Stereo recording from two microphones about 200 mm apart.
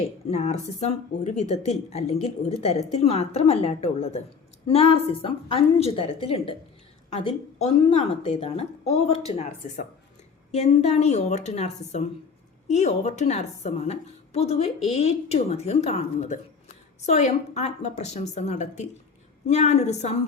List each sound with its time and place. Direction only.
0.3 s a woman's voice: 35° left (ahead or behind)